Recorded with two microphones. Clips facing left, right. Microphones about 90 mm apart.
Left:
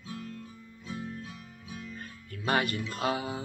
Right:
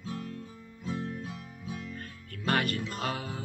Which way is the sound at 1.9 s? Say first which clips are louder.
Right 1 dB; 10° left (ahead or behind).